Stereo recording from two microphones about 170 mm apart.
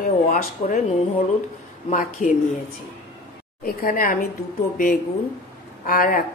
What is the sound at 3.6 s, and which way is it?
Speech, 55° left (ahead or behind).